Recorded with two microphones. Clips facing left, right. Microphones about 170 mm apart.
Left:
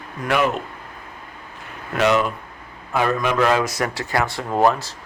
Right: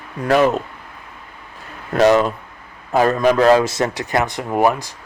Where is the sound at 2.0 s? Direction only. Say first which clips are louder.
Right 5 dB; 35° right (ahead or behind); by 4.9 s 15° right (ahead or behind).